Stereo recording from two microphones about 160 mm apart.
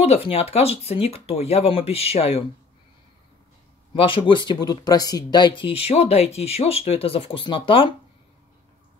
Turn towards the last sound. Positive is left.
turn(degrees=30)  # may be behind; listen again after turning